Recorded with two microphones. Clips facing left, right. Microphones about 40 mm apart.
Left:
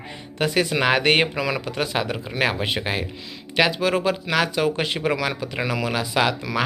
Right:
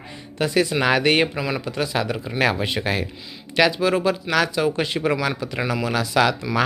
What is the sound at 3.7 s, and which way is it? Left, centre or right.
Speech, left.